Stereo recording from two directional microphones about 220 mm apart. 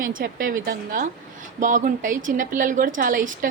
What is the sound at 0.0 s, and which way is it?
A woman's voice, 40° right (ahead or behind).